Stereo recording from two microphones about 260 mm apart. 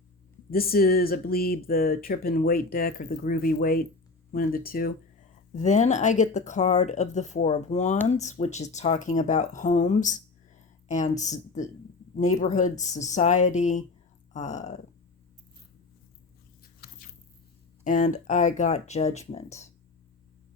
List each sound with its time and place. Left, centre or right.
0.5 s speech: left
17.8 s speech: left